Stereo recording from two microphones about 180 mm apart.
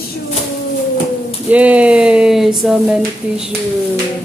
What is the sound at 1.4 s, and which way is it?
Speech, 10° right (ahead or behind).